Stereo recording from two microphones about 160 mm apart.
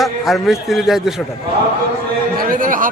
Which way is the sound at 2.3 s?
60° right (ahead or behind).